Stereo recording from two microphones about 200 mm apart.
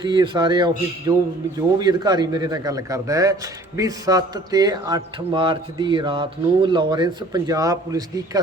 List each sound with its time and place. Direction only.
0.1 s speech: 20° right (ahead or behind)